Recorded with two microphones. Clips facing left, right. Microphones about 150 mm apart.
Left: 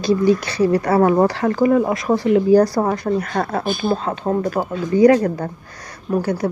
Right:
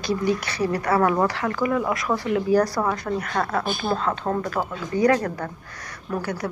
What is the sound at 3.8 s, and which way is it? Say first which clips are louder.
Speech: left 4 dB; 20° left (ahead or behind).